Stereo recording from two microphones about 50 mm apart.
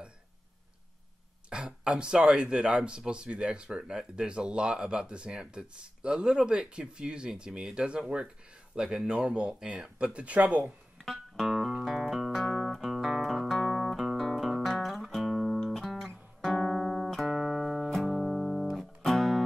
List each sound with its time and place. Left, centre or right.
1.5 s speech: right
11.0 s music: centre
11.5 s music: centre
16.1 s music: centre